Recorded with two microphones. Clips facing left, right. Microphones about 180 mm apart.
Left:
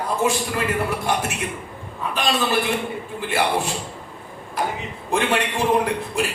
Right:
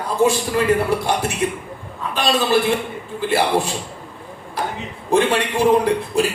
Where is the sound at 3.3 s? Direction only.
35° right (ahead or behind).